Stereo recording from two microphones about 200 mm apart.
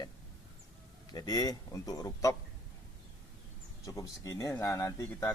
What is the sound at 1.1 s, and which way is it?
A man's voice, 20° left (ahead or behind).